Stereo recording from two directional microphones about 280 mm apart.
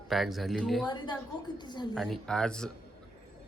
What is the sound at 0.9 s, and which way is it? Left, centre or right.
A woman's voice, centre.